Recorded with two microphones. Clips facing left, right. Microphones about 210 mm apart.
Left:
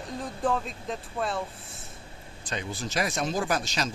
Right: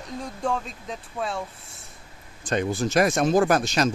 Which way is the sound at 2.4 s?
50° right (ahead or behind).